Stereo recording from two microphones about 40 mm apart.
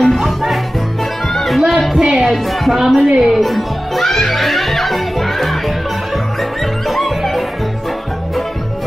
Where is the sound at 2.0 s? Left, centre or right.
Centre.